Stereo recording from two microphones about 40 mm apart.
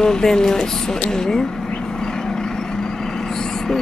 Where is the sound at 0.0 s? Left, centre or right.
Centre.